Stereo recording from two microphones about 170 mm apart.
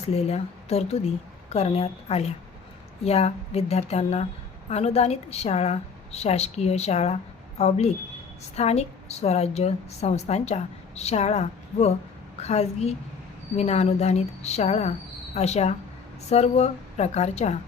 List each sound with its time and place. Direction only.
0.1 s a woman's voice: 40° left (ahead or behind)